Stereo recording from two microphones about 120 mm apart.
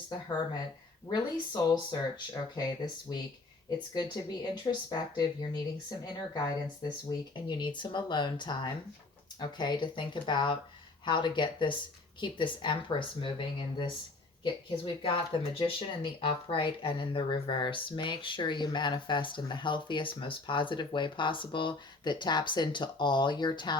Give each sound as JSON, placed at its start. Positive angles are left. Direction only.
{"t": 1.0, "sound": "speech", "side_deg": 35}
{"t": 3.9, "sound": "speech", "side_deg": 40}